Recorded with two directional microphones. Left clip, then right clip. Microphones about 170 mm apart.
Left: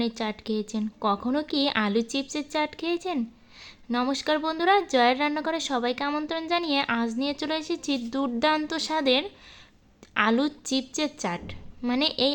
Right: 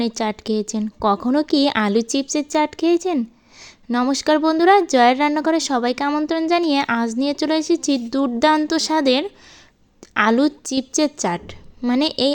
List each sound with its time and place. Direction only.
0.2 s a woman's voice: 40° right (ahead or behind)